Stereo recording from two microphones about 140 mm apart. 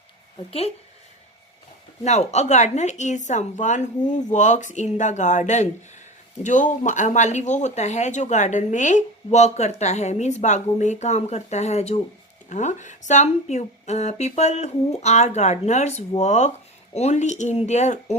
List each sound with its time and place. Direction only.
2.0 s speech: 55° left (ahead or behind)